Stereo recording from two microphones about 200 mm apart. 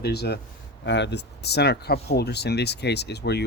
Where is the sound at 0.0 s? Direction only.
55° left (ahead or behind).